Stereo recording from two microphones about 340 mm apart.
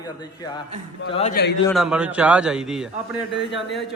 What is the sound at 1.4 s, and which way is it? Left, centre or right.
Speech, left.